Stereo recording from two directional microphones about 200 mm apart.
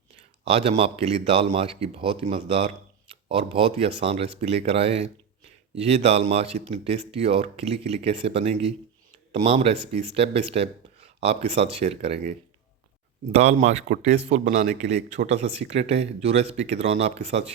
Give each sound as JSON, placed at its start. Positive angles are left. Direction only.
{"t": 0.4, "sound": "speech", "side_deg": -30}
{"t": 13.3, "sound": "speech", "side_deg": -35}